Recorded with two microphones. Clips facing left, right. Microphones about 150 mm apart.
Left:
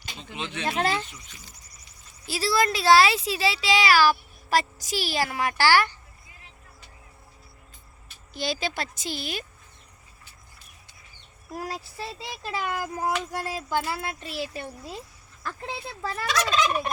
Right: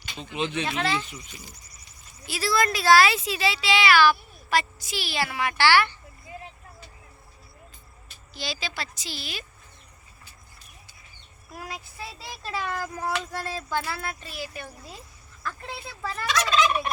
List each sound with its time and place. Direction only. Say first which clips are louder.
0.3 s speech: right 7 dB; 20° right (ahead or behind)
0.6 s a woman's voice: left 5 dB; 45° left (ahead or behind)
1.1 s speech: right 5 dB; 15° right (ahead or behind)
2.2 s speech: left 1 dB; 30° left (ahead or behind)
8.3 s a woman's voice: left 5 dB; 50° left (ahead or behind)
11.5 s speech: left 5 dB; 35° left (ahead or behind)
12.4 s speech: left 1 dB; 15° left (ahead or behind)
16.0 s speech: even; 25° left (ahead or behind)